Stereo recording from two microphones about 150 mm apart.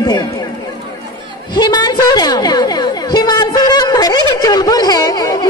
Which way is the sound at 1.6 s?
25° left (ahead or behind).